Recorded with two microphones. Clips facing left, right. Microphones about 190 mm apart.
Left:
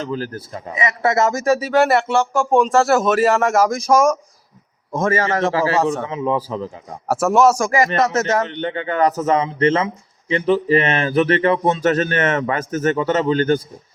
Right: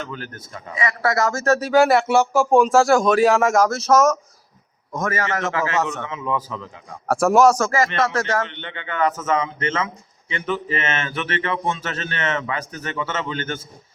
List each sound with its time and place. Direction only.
0.0 s speech: 35° left (ahead or behind)
0.7 s speech: 20° left (ahead or behind); by 3.7 s centre (ahead or behind)
3.7 s speech: 10° left (ahead or behind)
4.9 s speech: 30° left (ahead or behind)
7.1 s speech: centre (ahead or behind)
7.6 s speech: 15° left (ahead or behind)
8.4 s speech: 40° left (ahead or behind)